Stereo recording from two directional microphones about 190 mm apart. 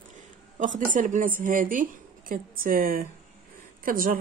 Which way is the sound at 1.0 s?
45° right (ahead or behind).